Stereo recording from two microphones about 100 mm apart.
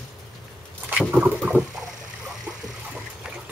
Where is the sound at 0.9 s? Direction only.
15° right (ahead or behind).